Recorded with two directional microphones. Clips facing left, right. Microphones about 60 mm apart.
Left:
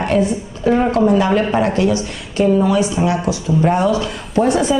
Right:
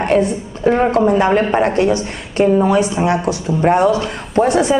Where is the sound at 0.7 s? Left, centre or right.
Right.